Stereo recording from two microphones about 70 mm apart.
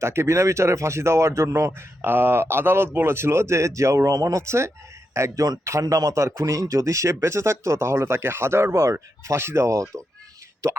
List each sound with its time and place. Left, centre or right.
0.0 s speech: right